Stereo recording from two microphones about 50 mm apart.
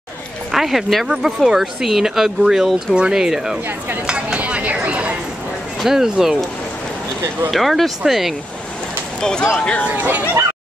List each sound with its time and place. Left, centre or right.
0.5 s speech: centre
4.0 s chopping: centre
4.8 s a sound: right
5.8 s speech: centre
7.5 s speech: centre
9.2 s speech: centre
9.8 s speech: right